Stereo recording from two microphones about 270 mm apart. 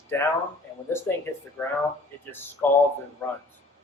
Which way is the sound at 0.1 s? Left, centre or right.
Centre.